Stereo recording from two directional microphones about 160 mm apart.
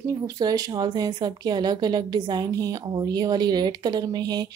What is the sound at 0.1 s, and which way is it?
Speech, 25° right (ahead or behind).